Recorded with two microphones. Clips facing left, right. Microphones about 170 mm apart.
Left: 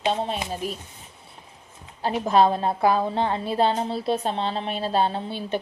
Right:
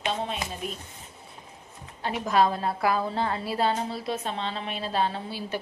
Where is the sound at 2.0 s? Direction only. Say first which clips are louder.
Left 4 dB; 30° left (ahead or behind).